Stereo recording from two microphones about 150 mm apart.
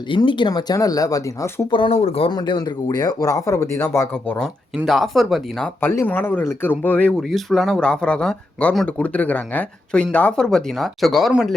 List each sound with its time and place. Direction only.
0.1 s speech: 30° left (ahead or behind)
1.7 s speech: 40° left (ahead or behind)
2.3 s speech: 30° left (ahead or behind)
4.8 s speech: centre (ahead or behind)